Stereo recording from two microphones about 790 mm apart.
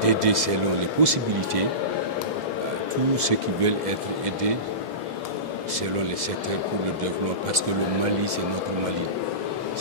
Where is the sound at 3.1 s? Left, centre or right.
Right.